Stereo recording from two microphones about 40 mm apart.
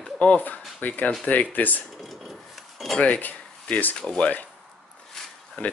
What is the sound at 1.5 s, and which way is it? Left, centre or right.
Speech, left.